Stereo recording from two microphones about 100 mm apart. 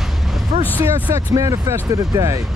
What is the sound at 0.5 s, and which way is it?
Vehicle, 80° right.